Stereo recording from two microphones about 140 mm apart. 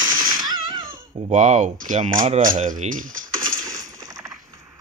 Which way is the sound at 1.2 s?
60° right (ahead or behind).